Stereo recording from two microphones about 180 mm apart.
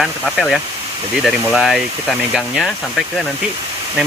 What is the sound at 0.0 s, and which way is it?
Speech, centre (ahead or behind).